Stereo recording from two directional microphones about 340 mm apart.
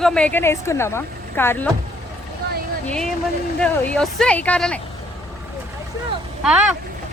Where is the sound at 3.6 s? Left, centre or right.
Centre.